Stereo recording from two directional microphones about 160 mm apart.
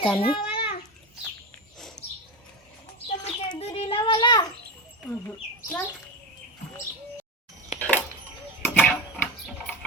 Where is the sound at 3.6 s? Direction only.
35° left (ahead or behind).